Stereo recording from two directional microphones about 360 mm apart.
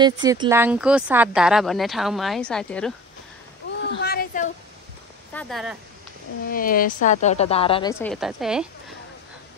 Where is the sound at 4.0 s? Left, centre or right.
Left.